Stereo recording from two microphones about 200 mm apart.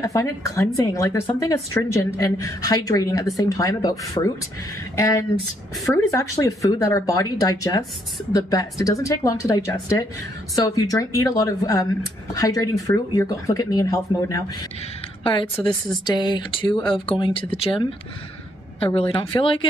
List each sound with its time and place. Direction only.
0.0 s speech: 15° left (ahead or behind)
16.1 s speech: 20° left (ahead or behind)
18.9 s speech: 25° left (ahead or behind)